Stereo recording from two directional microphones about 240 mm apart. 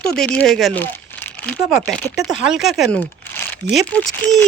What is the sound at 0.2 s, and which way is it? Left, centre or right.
Speech, centre.